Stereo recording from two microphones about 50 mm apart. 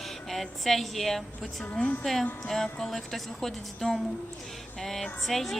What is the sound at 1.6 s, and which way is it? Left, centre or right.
Speech, left.